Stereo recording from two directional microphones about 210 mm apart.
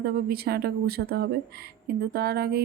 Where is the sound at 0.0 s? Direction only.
45° right (ahead or behind).